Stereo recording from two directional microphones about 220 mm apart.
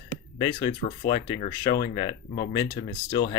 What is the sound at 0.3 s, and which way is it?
Speech, 20° left (ahead or behind).